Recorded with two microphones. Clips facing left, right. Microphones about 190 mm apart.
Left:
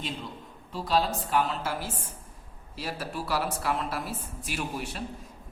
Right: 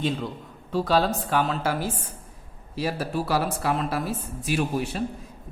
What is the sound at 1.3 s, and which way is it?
Speech, 90° right.